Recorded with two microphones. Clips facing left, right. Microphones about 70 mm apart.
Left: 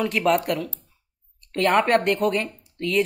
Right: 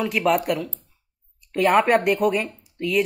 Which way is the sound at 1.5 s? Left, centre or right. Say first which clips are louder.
Right 2 dB; centre.